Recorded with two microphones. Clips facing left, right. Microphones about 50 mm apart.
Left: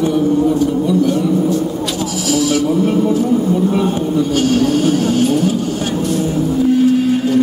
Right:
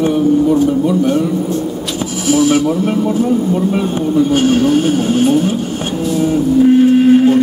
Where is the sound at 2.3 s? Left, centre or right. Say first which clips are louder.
Right 4 dB; right.